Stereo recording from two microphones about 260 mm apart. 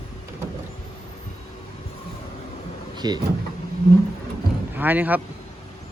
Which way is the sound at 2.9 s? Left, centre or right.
Centre.